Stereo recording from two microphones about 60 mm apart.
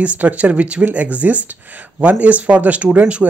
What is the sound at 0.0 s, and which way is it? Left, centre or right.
Speech, right.